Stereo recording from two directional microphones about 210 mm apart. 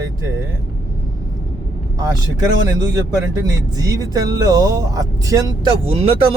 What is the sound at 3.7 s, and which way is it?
Speech, 15° right (ahead or behind).